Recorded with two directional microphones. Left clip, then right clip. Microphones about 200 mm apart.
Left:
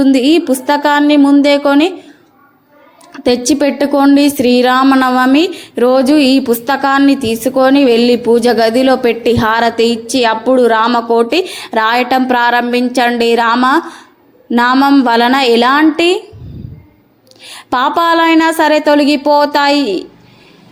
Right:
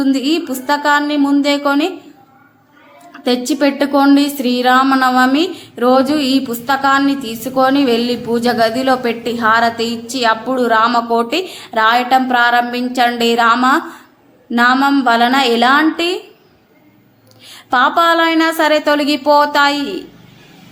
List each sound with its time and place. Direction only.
0.0 s speech: 25° left (ahead or behind)
3.1 s a woman's voice: 30° left (ahead or behind)
17.5 s speech: 25° left (ahead or behind)